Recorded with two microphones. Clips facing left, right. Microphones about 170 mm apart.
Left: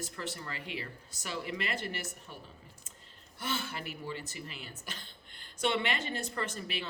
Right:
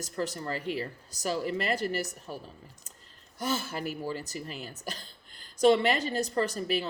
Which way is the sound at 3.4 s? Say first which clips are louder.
Right 6 dB; 40° right (ahead or behind).